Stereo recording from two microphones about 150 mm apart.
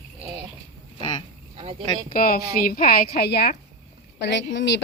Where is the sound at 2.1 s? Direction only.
70° left (ahead or behind); by 3.5 s 90° left.